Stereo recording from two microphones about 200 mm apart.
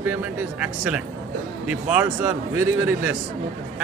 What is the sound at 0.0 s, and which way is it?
A man's voice, 10° right (ahead or behind).